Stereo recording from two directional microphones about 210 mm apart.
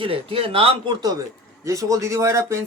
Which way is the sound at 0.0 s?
25° right (ahead or behind).